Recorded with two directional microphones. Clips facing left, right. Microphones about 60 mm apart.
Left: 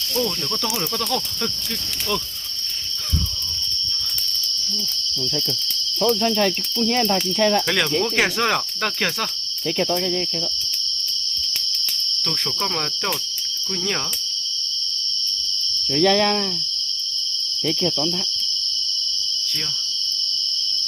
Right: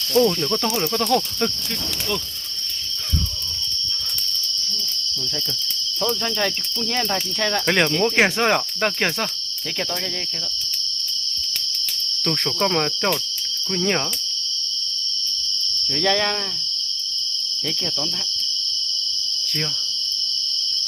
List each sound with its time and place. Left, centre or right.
0.1 s cricket: right
7.7 s cricket: right
12.2 s cricket: right